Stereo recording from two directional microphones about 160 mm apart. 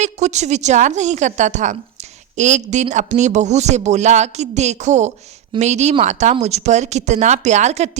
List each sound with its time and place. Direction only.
0.0 s a woman's voice: 45° right (ahead or behind)